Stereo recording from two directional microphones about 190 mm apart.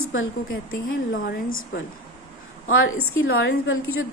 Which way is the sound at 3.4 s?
85° left.